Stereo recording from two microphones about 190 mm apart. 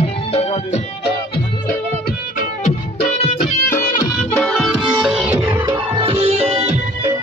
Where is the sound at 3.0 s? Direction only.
35° left (ahead or behind).